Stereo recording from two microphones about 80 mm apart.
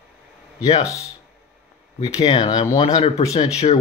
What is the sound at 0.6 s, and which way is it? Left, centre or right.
Speech, left.